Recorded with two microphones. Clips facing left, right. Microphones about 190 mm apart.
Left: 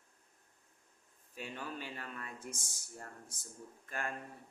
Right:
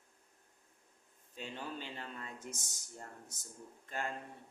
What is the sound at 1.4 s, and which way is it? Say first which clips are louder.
Speech: even; 25° right (ahead or behind).